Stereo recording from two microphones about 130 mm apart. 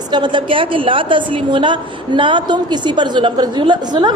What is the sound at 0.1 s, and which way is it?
A woman's voice, 40° right (ahead or behind).